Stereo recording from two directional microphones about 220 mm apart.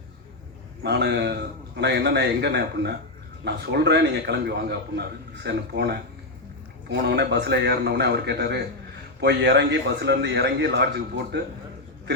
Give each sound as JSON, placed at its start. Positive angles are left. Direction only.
{"t": 0.8, "sound": "a man's voice", "side_deg": -50}